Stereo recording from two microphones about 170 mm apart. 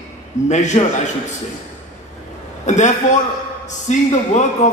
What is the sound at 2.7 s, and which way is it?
A man's voice, 45° left (ahead or behind).